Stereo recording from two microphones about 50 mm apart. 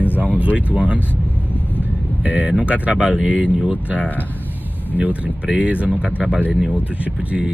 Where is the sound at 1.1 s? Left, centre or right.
Left.